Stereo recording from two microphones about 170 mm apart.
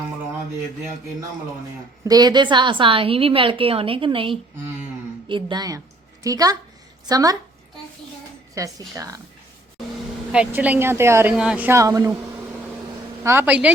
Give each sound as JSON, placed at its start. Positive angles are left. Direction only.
{"t": 2.0, "sound": "a woman's voice", "side_deg": -25}
{"t": 8.6, "sound": "a woman's voice", "side_deg": -20}
{"t": 10.3, "sound": "a woman's voice", "side_deg": -5}
{"t": 13.2, "sound": "a woman's voice", "side_deg": -10}